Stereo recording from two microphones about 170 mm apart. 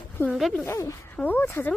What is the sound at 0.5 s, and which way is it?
Speech, 15° left (ahead or behind).